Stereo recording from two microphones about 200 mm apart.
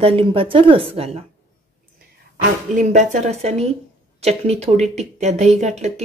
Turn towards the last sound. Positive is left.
turn(degrees=-35)  # may be behind; listen again after turning